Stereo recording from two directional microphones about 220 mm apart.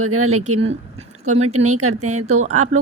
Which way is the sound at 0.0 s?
75° right (ahead or behind).